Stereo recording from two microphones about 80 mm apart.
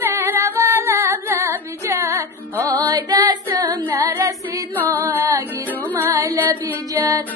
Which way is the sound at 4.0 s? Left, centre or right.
Right.